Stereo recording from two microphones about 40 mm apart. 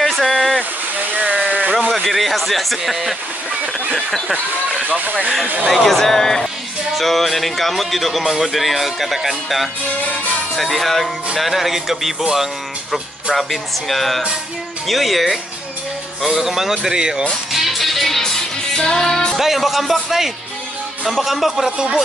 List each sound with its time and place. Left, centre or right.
0.0 s a sound: centre
0.9 s a sound: right
2.0 s speech: centre
4.8 s speech: right
5.7 s speech: centre
12.9 s speech: centre
17.5 s music: centre
19.3 s speech: centre
21.6 s speech: centre